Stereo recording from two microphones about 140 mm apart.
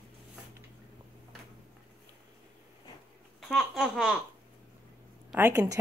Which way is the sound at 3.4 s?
Centre (ahead or behind).